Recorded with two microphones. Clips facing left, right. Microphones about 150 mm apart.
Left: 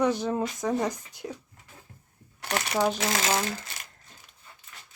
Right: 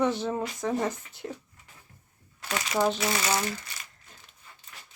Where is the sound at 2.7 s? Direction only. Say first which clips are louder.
Even; 10° left (ahead or behind).